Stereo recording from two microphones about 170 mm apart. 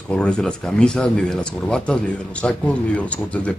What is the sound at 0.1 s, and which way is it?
Speech, 5° left (ahead or behind).